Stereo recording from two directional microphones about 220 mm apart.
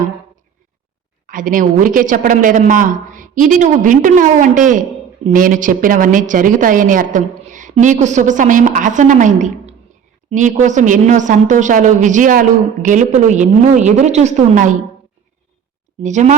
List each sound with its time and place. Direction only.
1.3 s a woman's voice: 40° right (ahead or behind)
16.0 s a woman's voice: 35° right (ahead or behind)